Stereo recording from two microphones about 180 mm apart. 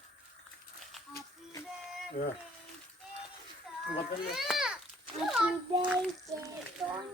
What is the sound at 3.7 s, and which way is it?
Children playing, 5° right (ahead or behind).